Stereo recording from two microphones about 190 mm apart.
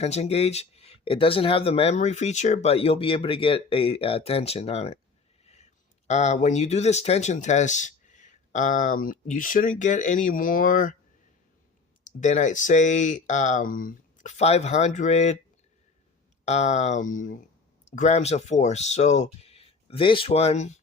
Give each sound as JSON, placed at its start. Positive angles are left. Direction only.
{"t": 0.0, "sound": "speech", "side_deg": 35}
{"t": 6.1, "sound": "speech", "side_deg": 35}
{"t": 12.0, "sound": "speech", "side_deg": 40}
{"t": 16.5, "sound": "speech", "side_deg": 35}